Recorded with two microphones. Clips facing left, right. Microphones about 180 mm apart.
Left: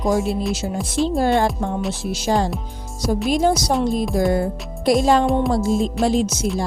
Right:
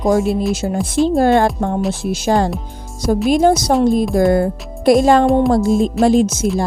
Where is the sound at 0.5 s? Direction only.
55° right (ahead or behind).